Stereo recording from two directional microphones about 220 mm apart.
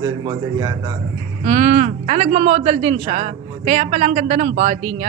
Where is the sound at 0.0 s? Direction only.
20° right (ahead or behind).